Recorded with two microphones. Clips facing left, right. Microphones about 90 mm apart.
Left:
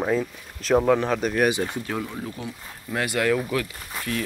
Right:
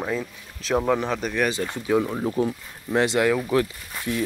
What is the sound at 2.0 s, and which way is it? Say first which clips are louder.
Speech: right 8 dB; 35° right (ahead or behind).